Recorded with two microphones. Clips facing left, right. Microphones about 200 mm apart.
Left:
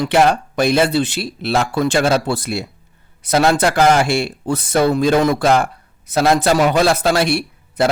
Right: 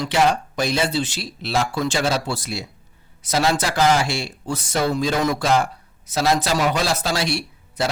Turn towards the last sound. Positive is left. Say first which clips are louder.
# left 7 dB
turn(degrees=55)  # may be behind; listen again after turning